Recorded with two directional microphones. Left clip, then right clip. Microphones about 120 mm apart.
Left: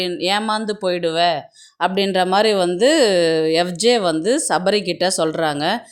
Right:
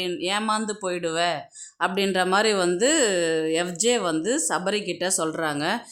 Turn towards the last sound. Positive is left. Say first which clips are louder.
# left 6 dB
turn(degrees=30)  # may be behind; listen again after turning